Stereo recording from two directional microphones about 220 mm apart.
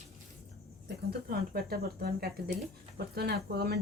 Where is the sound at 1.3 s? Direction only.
45° right (ahead or behind).